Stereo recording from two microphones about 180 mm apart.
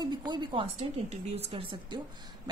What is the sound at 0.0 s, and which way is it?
A woman's voice, 25° right (ahead or behind).